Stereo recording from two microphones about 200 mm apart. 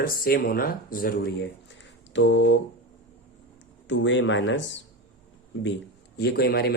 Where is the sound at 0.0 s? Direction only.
50° left (ahead or behind).